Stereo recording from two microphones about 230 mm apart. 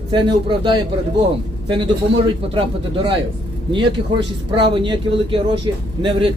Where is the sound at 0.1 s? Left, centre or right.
Right.